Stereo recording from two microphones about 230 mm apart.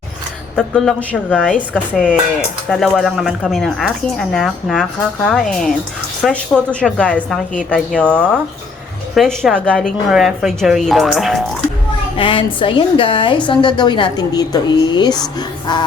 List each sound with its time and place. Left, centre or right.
0.5 s speech: centre
2.6 s speech: centre
12.1 s a woman's voice: left
15.4 s music: centre